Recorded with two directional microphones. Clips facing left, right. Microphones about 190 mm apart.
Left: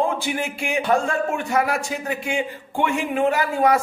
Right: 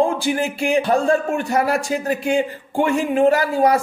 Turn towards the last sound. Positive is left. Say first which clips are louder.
# right 3 dB
turn(degrees=-35)  # may be behind; listen again after turning